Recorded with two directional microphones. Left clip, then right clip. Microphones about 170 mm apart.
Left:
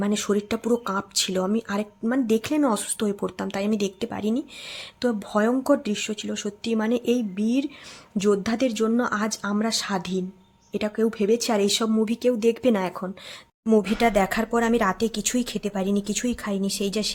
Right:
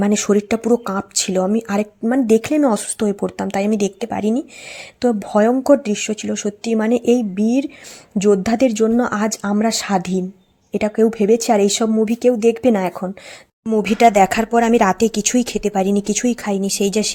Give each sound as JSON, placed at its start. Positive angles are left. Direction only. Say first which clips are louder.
{"t": 0.0, "sound": "speech", "louder": "right 8 dB", "side_deg": -30}